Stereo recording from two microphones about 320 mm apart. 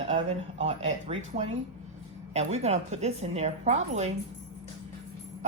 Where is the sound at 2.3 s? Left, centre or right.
Centre.